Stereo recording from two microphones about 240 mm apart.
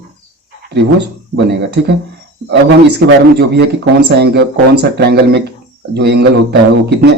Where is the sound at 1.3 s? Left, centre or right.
Right.